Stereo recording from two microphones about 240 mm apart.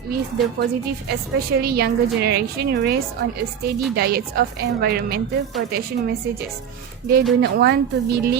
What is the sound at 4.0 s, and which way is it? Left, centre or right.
A woman's voice, right.